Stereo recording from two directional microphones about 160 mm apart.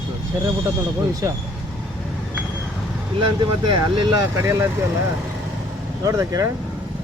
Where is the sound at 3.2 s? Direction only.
30° right (ahead or behind).